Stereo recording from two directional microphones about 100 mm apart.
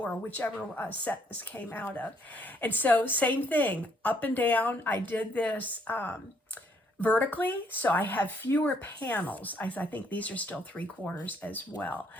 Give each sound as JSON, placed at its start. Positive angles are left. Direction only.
{"t": 0.0, "sound": "speech", "side_deg": 15}